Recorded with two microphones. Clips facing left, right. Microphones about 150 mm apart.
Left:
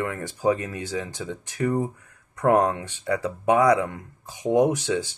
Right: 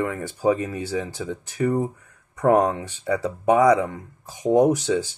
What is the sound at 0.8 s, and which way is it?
Speech, 10° right (ahead or behind).